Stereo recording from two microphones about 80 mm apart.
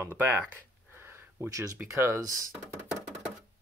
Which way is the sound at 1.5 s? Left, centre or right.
Right.